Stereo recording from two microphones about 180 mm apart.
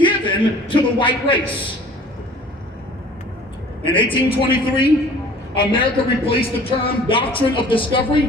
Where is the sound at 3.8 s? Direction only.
30° left (ahead or behind).